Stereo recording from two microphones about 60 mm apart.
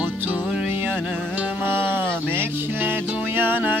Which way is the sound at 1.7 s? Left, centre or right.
Right.